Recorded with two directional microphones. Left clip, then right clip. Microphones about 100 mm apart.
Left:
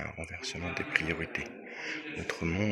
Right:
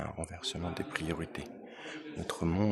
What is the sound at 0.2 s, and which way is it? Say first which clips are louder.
Speech: even; 65° right (ahead or behind).